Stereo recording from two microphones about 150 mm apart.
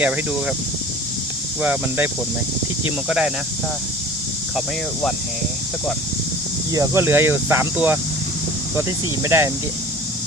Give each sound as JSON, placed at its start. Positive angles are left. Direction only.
{"t": 1.6, "sound": "speech", "side_deg": -10}
{"t": 3.1, "sound": "speech", "side_deg": -5}
{"t": 6.7, "sound": "speech", "side_deg": -15}
{"t": 9.2, "sound": "speech", "side_deg": -15}